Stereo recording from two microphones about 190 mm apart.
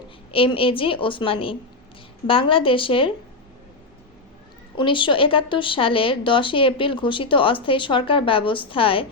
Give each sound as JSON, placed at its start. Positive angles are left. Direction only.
{"t": 0.3, "sound": "a woman's voice", "side_deg": 30}
{"t": 4.8, "sound": "a woman's voice", "side_deg": 25}